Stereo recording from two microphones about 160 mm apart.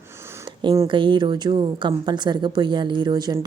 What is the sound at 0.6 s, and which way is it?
A woman's voice, 25° right (ahead or behind).